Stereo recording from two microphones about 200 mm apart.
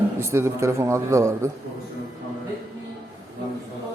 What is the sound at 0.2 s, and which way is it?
A man's voice, 10° right (ahead or behind).